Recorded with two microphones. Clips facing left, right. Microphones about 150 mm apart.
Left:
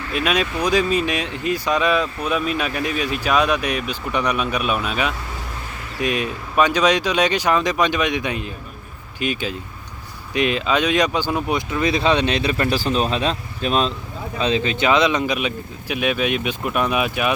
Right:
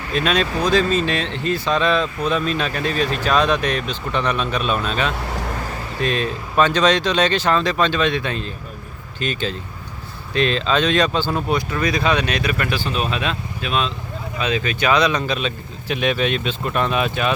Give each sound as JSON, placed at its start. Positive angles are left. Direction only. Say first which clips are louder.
{"t": 0.1, "sound": "speech", "louder": "right 2 dB", "side_deg": 10}
{"t": 14.3, "sound": "speech", "louder": "left 2 dB", "side_deg": 25}